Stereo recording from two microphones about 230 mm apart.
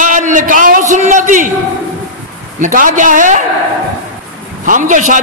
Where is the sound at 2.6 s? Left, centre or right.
Right.